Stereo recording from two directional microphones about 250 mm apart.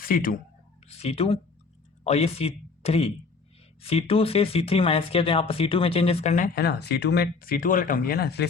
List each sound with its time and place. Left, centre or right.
0.1 s speech: left